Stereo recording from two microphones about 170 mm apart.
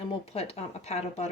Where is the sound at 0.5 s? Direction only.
40° left (ahead or behind).